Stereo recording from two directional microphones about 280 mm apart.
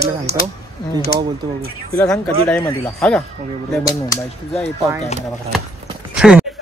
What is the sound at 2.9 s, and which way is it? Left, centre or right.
Speech, centre.